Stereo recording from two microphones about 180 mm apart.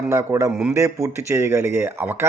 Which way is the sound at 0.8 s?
15° right (ahead or behind).